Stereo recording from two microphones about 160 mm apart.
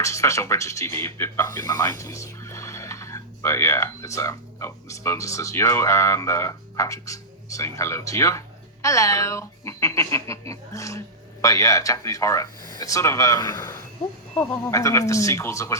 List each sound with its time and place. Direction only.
0.0 s speech: 20° left (ahead or behind)